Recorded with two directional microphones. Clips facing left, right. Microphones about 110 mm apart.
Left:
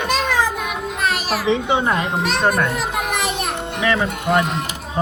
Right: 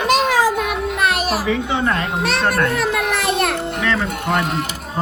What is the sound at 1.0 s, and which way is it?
Music, 55° right (ahead or behind).